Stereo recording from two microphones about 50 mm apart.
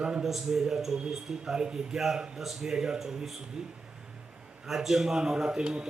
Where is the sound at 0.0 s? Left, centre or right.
Centre.